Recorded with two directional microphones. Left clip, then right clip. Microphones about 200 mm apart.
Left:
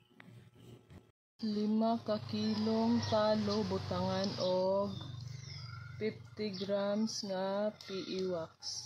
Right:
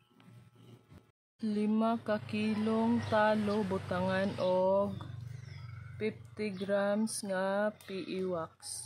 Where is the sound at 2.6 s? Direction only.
15° right (ahead or behind).